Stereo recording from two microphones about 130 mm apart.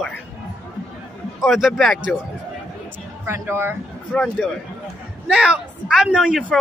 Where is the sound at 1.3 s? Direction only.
Centre (ahead or behind).